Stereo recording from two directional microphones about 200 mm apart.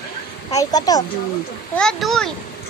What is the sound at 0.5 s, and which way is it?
Speech, 20° left (ahead or behind).